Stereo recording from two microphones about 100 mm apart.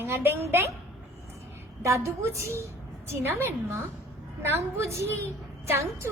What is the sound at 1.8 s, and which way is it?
Speech, 30° right (ahead or behind).